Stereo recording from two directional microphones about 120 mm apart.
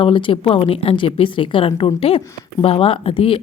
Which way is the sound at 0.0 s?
45° left (ahead or behind).